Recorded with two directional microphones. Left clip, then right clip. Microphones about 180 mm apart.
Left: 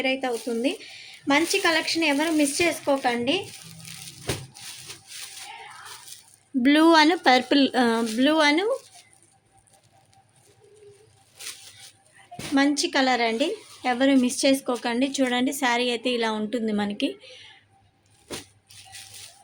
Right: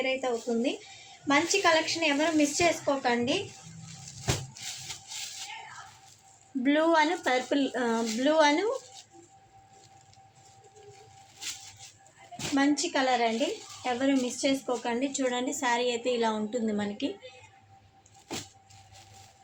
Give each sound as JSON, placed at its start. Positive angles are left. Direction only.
{"t": 0.0, "sound": "a woman's voice", "side_deg": 45}
{"t": 6.6, "sound": "speech", "side_deg": 70}
{"t": 12.5, "sound": "speech", "side_deg": 60}